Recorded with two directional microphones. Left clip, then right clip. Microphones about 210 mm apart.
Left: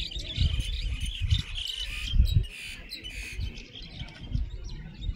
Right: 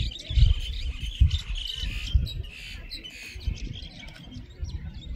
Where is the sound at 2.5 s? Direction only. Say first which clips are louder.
Even; 55° left (ahead or behind).